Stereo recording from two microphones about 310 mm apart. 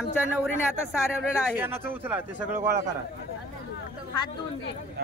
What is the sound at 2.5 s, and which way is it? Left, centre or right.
Speech, right.